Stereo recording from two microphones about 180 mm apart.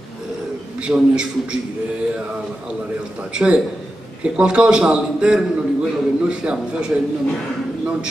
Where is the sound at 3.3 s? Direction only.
5° right (ahead or behind).